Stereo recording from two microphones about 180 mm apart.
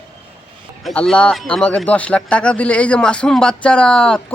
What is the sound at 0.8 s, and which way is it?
A man's voice, 5° left (ahead or behind).